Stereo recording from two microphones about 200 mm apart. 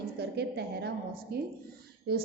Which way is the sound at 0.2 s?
55° right (ahead or behind).